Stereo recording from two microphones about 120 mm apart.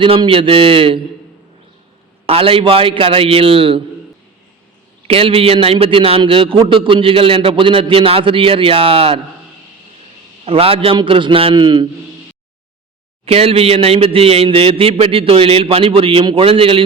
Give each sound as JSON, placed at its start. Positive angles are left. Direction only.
{"t": 0.0, "sound": "a man's voice", "side_deg": -45}
{"t": 2.2, "sound": "a man's voice", "side_deg": -50}
{"t": 5.0, "sound": "a man's voice", "side_deg": -50}
{"t": 10.4, "sound": "a man's voice", "side_deg": -55}
{"t": 13.2, "sound": "a man's voice", "side_deg": -55}